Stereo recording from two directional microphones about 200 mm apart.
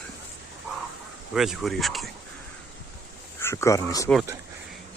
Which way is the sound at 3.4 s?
15° left (ahead or behind).